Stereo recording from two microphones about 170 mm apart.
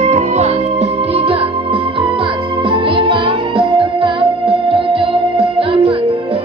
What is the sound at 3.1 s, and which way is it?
Music, 30° right (ahead or behind).